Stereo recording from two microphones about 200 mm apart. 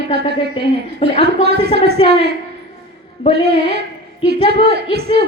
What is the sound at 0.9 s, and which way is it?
Speech, 30° left (ahead or behind).